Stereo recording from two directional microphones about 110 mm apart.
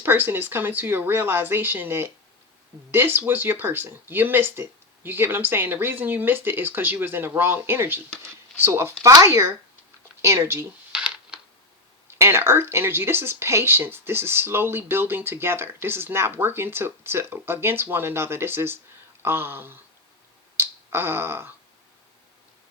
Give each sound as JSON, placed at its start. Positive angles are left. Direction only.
{"t": 0.0, "sound": "speech", "side_deg": -20}
{"t": 10.9, "sound": "a sound", "side_deg": -10}
{"t": 12.0, "sound": "speech", "side_deg": -25}
{"t": 20.6, "sound": "finger snapping", "side_deg": -20}